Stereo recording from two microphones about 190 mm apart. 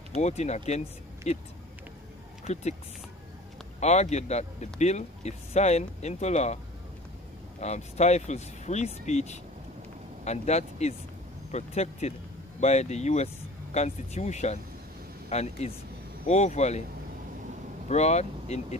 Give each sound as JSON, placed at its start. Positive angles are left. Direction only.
{"t": 0.1, "sound": "speech", "side_deg": 35}
{"t": 2.4, "sound": "speech", "side_deg": 35}
{"t": 3.8, "sound": "speech", "side_deg": 35}
{"t": 7.6, "sound": "speech", "side_deg": 35}
{"t": 17.8, "sound": "speech", "side_deg": 35}